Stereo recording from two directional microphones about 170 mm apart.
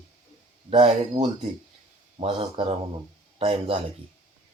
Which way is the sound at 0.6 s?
30° right (ahead or behind).